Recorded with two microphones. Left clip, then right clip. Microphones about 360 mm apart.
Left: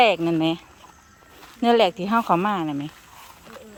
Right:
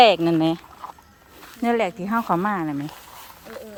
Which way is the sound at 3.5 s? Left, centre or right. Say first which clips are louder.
Right 6 dB; centre.